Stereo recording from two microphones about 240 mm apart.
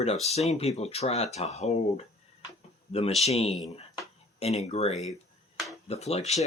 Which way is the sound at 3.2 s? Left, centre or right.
Left.